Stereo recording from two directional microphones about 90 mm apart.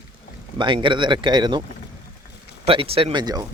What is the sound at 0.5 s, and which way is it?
Speech, 60° right (ahead or behind).